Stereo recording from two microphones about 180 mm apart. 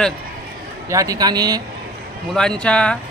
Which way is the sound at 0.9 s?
20° right (ahead or behind).